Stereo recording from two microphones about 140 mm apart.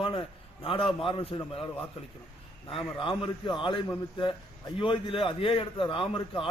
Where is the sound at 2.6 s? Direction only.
40° left (ahead or behind).